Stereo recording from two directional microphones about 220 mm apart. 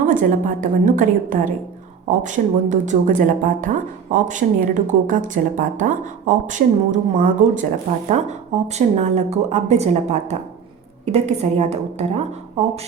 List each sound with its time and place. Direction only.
0.1 s a woman's voice: 35° right (ahead or behind)